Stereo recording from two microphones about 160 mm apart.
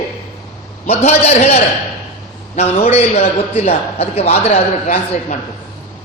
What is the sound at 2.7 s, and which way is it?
A man's voice, 40° left (ahead or behind).